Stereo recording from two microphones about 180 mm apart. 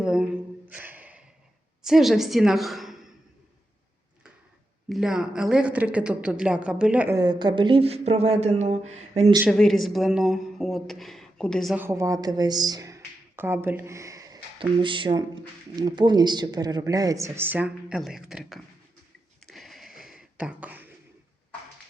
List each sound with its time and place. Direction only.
0.0 s a sound: 5° right (ahead or behind)
1.8 s a woman's voice: centre (ahead or behind)
4.9 s a woman's voice: 5° right (ahead or behind)
7.2 s speech: 25° right (ahead or behind)
9.5 s a woman's voice: centre (ahead or behind)
11.8 s speech: 15° right (ahead or behind)
19.5 s a sound: centre (ahead or behind)